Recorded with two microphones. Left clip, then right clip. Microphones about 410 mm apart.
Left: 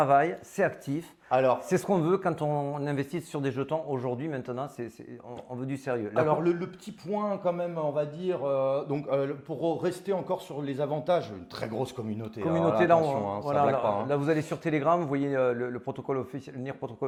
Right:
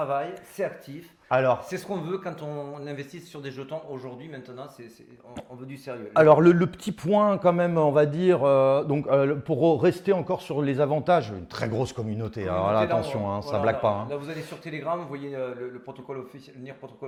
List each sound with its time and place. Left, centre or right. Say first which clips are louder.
0.0 s speech: left 5 dB; left
1.3 s a man's voice: right 2 dB; right
1.7 s speech: left 5 dB; left
5.6 s a man's voice: left 7 dB; left
6.2 s a man's voice: right 10 dB; right
14.1 s speech: left 6 dB; left